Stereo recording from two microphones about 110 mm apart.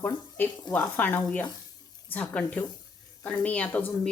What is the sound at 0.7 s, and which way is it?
Speech, 15° left (ahead or behind).